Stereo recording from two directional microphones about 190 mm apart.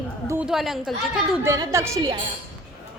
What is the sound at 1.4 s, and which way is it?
Speech, 15° right (ahead or behind).